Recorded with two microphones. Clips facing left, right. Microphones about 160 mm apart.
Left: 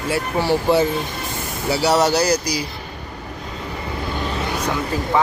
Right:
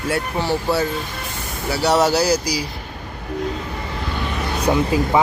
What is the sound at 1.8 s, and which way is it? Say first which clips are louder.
Speech: right 1 dB; centre (ahead or behind).